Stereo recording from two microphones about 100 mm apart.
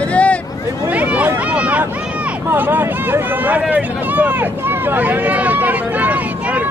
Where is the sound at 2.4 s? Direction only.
20° right (ahead or behind).